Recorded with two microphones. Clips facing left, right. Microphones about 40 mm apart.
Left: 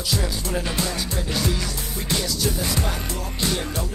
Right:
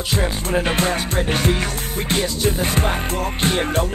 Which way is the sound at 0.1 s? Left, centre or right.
Right.